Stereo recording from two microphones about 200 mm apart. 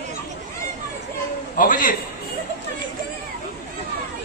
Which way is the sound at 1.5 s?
45° left (ahead or behind).